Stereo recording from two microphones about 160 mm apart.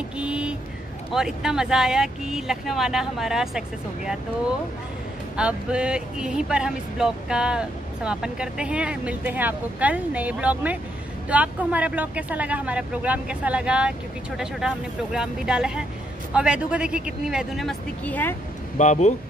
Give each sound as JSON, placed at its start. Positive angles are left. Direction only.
{"t": 0.2, "sound": "vehicle", "side_deg": -5}
{"t": 1.1, "sound": "speech", "side_deg": -5}
{"t": 5.3, "sound": "speech", "side_deg": -5}
{"t": 18.8, "sound": "speech", "side_deg": 50}